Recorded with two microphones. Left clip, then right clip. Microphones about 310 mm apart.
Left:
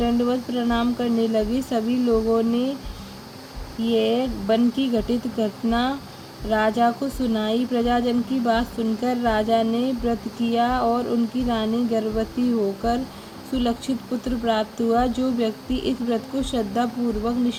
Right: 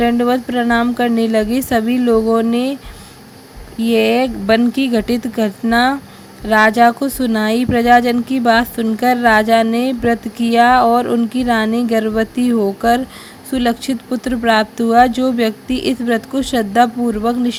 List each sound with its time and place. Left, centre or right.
0.0 s speech: right
3.9 s speech: right